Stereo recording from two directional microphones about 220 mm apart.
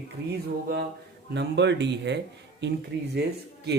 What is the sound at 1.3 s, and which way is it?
Speech, 50° right (ahead or behind).